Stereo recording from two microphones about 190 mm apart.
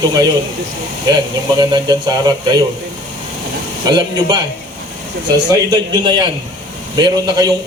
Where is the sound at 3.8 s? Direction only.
20° right (ahead or behind).